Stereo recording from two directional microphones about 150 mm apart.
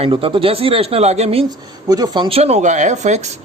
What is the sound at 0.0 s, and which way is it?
A man's voice, 35° right (ahead or behind).